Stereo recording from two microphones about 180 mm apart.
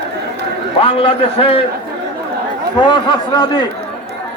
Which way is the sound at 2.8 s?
25° left (ahead or behind).